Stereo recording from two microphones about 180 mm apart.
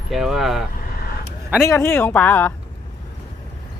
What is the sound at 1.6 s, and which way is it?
Speech, 15° left (ahead or behind).